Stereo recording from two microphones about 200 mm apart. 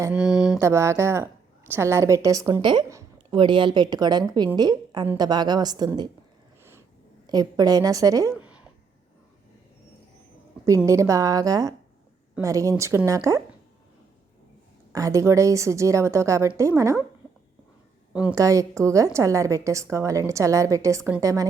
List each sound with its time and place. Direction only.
0.0 s a woman's voice: 5° right (ahead or behind); by 6.1 s 20° right (ahead or behind)
6.6 s a sound: 10° right (ahead or behind)
7.3 s a woman's voice: 20° right (ahead or behind)
8.4 s a sound: 5° right (ahead or behind)
10.8 s a woman's voice: 15° right (ahead or behind)
14.9 s a woman's voice: 15° right (ahead or behind)
18.1 s a woman's voice: 5° right (ahead or behind)